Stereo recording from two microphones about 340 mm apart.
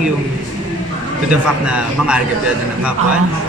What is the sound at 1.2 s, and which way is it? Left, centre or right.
Speech, centre.